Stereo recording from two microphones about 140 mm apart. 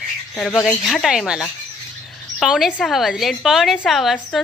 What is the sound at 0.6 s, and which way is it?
Speech, centre (ahead or behind).